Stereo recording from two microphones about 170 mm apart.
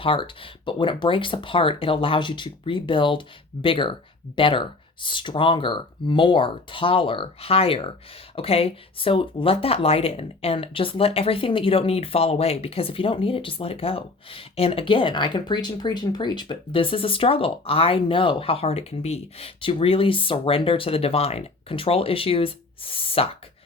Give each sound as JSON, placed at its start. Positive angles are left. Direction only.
{"t": 0.0, "sound": "speech", "side_deg": 30}